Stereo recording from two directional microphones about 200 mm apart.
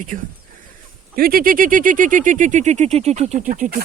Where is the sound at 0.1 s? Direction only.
40° right (ahead or behind).